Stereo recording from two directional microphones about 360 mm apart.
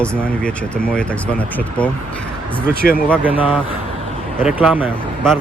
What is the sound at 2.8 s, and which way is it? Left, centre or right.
Speech, left.